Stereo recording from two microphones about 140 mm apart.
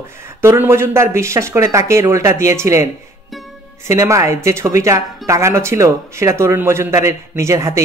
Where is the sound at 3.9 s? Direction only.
20° right (ahead or behind).